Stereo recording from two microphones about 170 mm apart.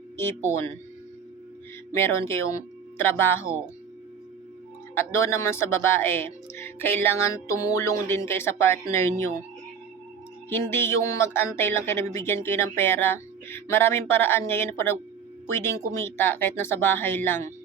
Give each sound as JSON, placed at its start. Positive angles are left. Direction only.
{"t": 1.9, "sound": "speech", "side_deg": 15}
{"t": 4.9, "sound": "speech", "side_deg": 15}
{"t": 10.5, "sound": "speech", "side_deg": 15}